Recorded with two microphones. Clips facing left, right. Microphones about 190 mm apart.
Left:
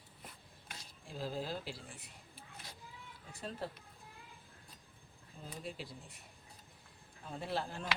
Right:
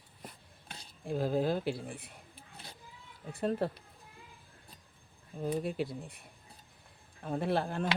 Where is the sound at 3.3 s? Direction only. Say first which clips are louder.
Right 11 dB; 55° right (ahead or behind).